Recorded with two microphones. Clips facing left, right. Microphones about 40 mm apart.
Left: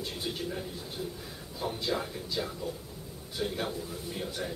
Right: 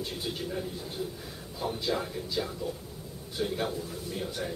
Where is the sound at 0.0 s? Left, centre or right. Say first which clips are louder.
Right 1 dB; centre.